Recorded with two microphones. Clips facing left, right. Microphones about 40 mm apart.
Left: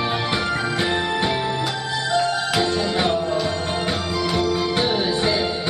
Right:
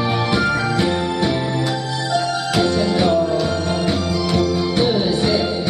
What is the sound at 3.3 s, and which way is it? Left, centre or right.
Music, centre.